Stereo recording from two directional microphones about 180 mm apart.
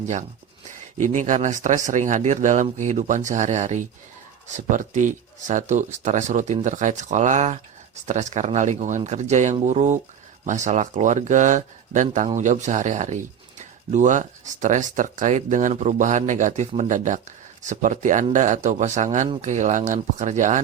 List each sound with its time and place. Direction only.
1.0 s speech: 45° right (ahead or behind)